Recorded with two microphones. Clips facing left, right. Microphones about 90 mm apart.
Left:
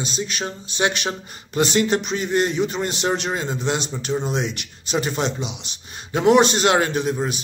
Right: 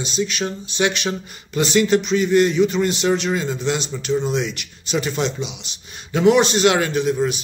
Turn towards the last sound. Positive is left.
turn(degrees=40)  # may be behind; listen again after turning